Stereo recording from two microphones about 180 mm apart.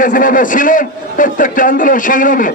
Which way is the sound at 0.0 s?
50° left (ahead or behind).